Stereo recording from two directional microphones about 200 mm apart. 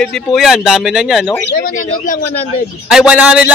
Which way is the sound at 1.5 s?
40° left (ahead or behind).